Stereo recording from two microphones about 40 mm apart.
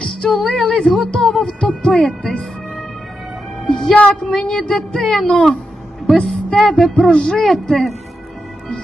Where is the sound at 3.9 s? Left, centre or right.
Left.